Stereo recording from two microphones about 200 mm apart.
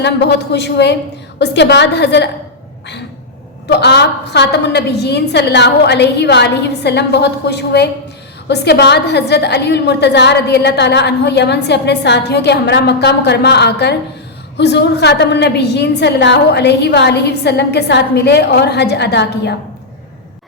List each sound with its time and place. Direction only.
0.0 s a woman's voice: 55° left (ahead or behind)
3.7 s a woman's voice: 55° left (ahead or behind)